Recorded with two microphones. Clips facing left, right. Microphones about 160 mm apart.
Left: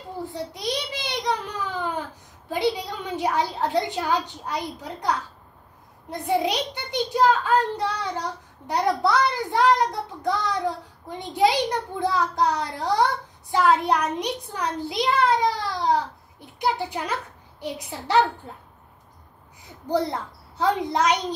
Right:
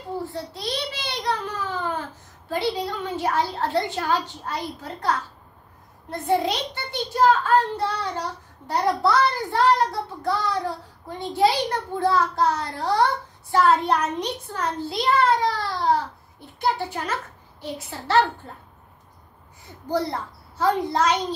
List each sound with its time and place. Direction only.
0.3 s a sound: 15° left (ahead or behind)
2.5 s a woman's voice: 15° left (ahead or behind)
19.9 s a child's voice: 20° left (ahead or behind)